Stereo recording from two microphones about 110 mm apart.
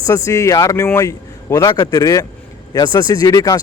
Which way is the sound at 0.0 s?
30° left (ahead or behind).